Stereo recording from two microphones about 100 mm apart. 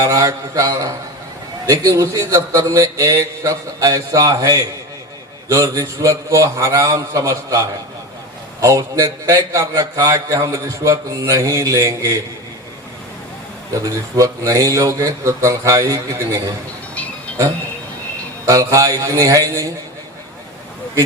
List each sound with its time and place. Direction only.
0.0 s a man's voice: 30° right (ahead or behind)
8.6 s a man's voice: 35° right (ahead or behind)
13.7 s a man's voice: 35° right (ahead or behind)
16.9 s music: 15° left (ahead or behind)
18.4 s a man's voice: 35° right (ahead or behind)